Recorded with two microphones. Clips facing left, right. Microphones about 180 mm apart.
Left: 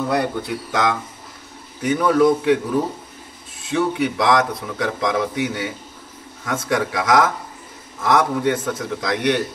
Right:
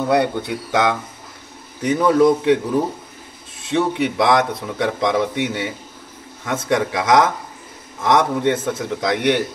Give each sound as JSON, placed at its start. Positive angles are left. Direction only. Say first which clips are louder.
{"t": 0.1, "sound": "a man's voice", "louder": "right 3 dB", "side_deg": -25}
{"t": 3.6, "sound": "a man's voice", "louder": "right 1 dB", "side_deg": -25}